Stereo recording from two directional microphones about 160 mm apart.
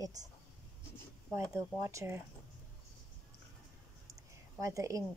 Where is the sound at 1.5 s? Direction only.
20° right (ahead or behind).